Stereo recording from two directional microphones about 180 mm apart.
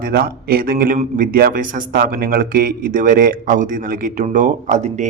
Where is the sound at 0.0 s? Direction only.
55° right (ahead or behind).